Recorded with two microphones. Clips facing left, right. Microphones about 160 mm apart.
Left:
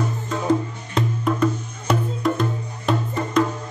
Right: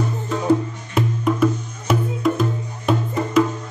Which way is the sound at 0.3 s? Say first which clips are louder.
Right 3 dB; 5° right (ahead or behind).